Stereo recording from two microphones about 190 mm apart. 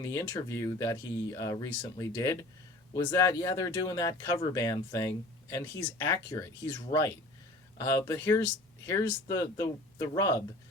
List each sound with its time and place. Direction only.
0.0 s speech: 15° left (ahead or behind)